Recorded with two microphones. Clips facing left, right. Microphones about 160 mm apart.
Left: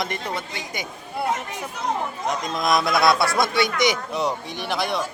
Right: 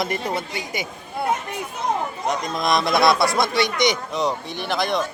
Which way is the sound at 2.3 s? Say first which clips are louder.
Even; centre (ahead or behind).